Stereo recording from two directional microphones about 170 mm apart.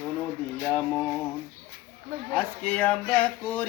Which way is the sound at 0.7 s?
10° left (ahead or behind).